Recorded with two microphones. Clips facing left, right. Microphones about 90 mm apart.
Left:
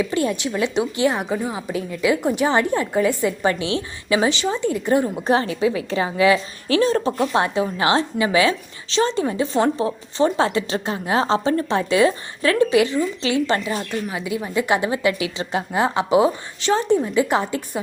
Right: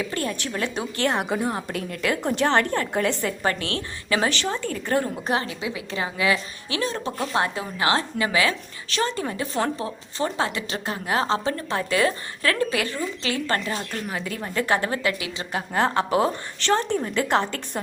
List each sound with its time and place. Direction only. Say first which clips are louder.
0.0 s a woman's voice: left 6 dB; 15° left (ahead or behind)
1.0 s a woman's voice: right 1 dB; centre (ahead or behind); by 5.1 s 15° left (ahead or behind)
5.2 s a woman's voice: left 7 dB; 30° left (ahead or behind)
7.2 s a woman's voice: left 5 dB; 25° left (ahead or behind)
13.6 s a woman's voice: left 4 dB; 10° left (ahead or behind)
15.7 s a woman's voice: left 3 dB; 15° left (ahead or behind)